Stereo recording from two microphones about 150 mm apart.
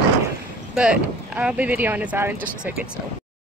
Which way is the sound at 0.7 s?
5° right (ahead or behind).